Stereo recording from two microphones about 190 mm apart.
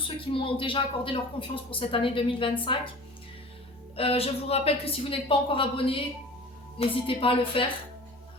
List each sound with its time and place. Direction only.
0.3 s a woman's voice: 25° left (ahead or behind)
3.9 s a woman's voice: 30° left (ahead or behind)